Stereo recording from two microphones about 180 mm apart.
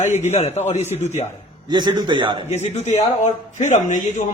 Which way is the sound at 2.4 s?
40° left (ahead or behind).